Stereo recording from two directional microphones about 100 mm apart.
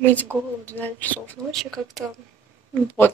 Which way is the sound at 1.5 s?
Centre (ahead or behind).